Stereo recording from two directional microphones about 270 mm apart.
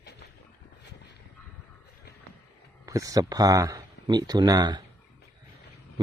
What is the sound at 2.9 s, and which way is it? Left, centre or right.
Speech, centre.